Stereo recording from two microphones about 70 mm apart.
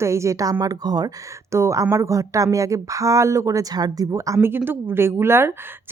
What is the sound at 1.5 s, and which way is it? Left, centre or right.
Speech, right.